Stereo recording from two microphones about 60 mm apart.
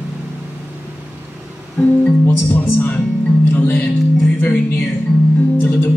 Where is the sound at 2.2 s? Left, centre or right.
Left.